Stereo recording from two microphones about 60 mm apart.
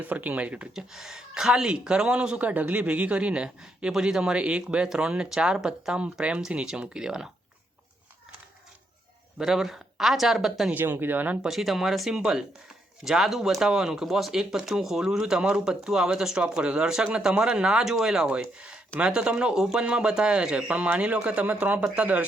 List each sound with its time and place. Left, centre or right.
0.0 s speech: right
0.7 s speech: centre
9.4 s speech: centre
10.7 s speech: right
11.4 s speech: centre; by 22.2 s right